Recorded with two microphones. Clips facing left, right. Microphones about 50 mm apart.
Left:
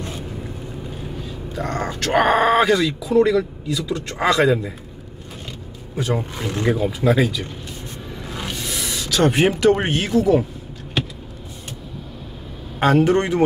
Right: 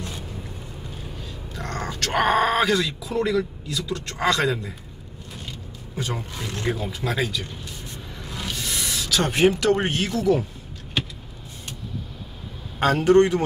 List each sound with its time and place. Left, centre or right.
1.2 s a sound: centre
2.2 s speech: centre
6.1 s a man's voice: left
6.5 s speech: centre
8.2 s music: left
8.5 s a sound: centre
9.8 s speech: centre
12.7 s a man's voice: centre